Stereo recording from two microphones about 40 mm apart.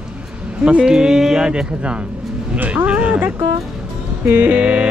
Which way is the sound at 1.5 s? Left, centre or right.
Right.